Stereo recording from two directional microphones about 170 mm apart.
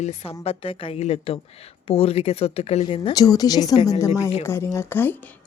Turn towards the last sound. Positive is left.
turn(degrees=10)  # may be behind; listen again after turning